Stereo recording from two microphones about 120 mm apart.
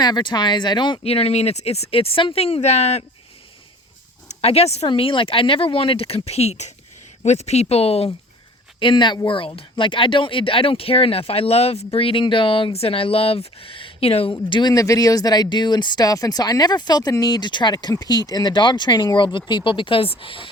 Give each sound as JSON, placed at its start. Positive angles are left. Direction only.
{"t": 0.0, "sound": "speech", "side_deg": 40}
{"t": 1.0, "sound": "speech", "side_deg": 55}
{"t": 4.3, "sound": "speech", "side_deg": 55}
{"t": 4.9, "sound": "speech", "side_deg": 45}
{"t": 8.8, "sound": "speech", "side_deg": 40}
{"t": 14.7, "sound": "speech", "side_deg": 30}